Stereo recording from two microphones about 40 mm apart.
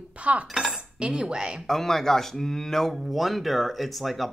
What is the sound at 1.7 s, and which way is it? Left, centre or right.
Speech, centre.